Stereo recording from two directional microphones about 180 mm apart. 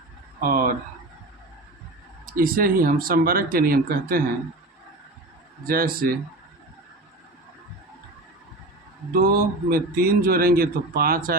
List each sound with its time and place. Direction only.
0.4 s speech: 50° right (ahead or behind)
2.2 s speech: 55° right (ahead or behind)
5.6 s a man's voice: 55° right (ahead or behind)
9.1 s a man's voice: 55° right (ahead or behind)